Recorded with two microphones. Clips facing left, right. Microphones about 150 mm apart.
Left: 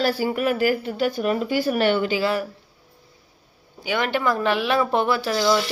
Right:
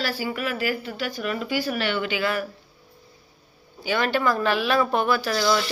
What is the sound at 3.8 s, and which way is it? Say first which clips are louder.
A woman's voice: even; 20° left (ahead or behind).